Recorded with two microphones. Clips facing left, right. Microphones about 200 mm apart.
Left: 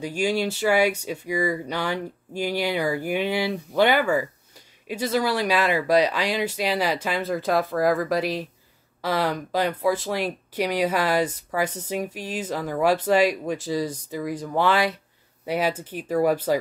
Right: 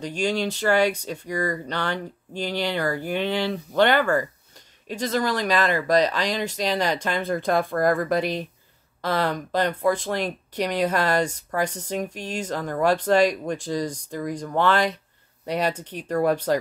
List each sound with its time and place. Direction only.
0.0 s speech: 10° left (ahead or behind)